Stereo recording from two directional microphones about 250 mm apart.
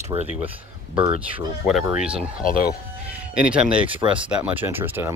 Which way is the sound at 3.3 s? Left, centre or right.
Centre.